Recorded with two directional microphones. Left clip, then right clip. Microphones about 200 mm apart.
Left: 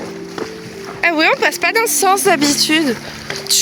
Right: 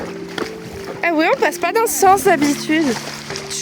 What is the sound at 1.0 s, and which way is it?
A woman's voice, 15° right (ahead or behind).